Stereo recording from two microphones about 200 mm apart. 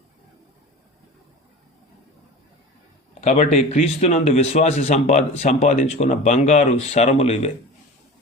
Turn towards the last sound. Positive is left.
turn(degrees=30)  # may be behind; listen again after turning